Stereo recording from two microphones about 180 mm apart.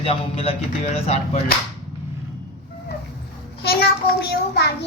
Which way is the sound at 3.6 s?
60° left (ahead or behind).